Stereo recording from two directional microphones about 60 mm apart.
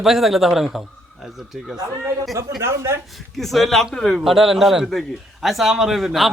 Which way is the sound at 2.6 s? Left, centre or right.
Right.